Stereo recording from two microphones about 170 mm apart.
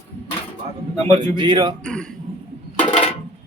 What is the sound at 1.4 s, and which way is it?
Speech, 25° right (ahead or behind).